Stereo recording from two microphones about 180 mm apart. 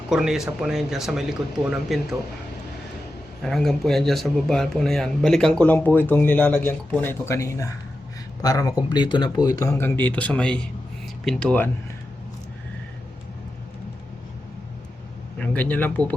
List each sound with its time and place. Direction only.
0.1 s speech: centre (ahead or behind)
3.4 s speech: centre (ahead or behind)
15.4 s speech: 5° left (ahead or behind)